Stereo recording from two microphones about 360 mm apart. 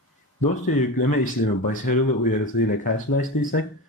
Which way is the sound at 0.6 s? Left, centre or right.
Left.